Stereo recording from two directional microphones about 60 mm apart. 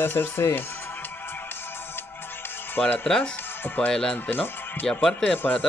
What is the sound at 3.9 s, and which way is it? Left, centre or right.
Speech, centre.